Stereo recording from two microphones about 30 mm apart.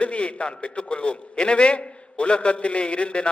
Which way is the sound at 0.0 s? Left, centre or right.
Left.